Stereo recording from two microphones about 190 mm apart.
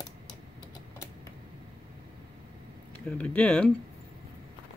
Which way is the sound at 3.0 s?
5° left (ahead or behind).